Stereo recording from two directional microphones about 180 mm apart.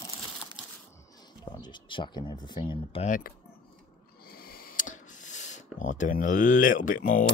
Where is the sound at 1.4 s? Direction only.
25° left (ahead or behind).